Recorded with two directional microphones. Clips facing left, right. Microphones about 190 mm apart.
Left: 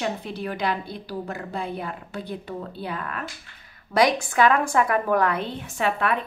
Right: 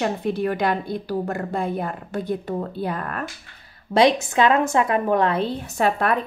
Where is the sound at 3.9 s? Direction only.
25° right (ahead or behind).